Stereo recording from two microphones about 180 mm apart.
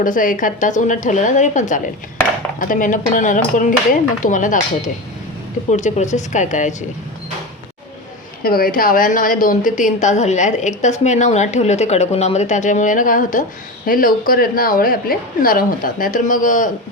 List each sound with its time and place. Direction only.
0.0 s a woman's voice: 50° left (ahead or behind)
5.7 s a woman's voice: 40° left (ahead or behind)
8.4 s a woman's voice: 55° left (ahead or behind)